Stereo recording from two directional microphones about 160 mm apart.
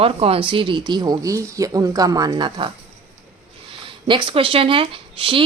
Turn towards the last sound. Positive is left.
turn(degrees=-35)  # may be behind; listen again after turning